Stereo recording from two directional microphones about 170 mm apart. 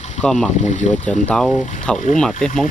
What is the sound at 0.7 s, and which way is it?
Speech, 50° left (ahead or behind).